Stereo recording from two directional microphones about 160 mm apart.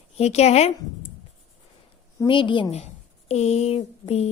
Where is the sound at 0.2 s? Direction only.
40° left (ahead or behind).